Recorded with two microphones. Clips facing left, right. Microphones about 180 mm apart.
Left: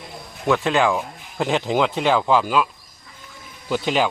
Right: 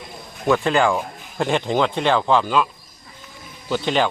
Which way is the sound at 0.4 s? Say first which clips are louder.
Right 1 dB; centre (ahead or behind).